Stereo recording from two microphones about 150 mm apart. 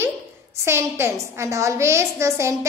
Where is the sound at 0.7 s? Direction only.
15° right (ahead or behind).